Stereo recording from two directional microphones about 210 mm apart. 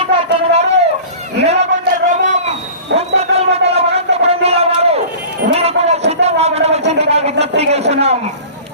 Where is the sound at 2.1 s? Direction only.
35° right (ahead or behind).